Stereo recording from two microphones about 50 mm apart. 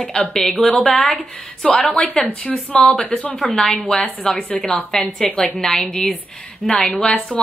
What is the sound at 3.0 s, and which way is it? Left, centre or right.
Speech, centre.